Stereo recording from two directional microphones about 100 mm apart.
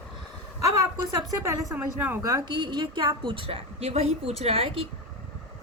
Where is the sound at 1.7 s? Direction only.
20° right (ahead or behind).